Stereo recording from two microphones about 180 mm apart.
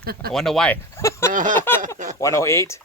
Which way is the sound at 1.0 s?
15° left (ahead or behind).